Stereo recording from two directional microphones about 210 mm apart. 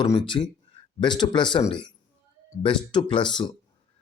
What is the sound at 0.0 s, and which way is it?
A man's voice, 20° left (ahead or behind).